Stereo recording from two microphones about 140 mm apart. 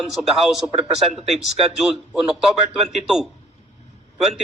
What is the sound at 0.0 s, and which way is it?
Speech, centre (ahead or behind).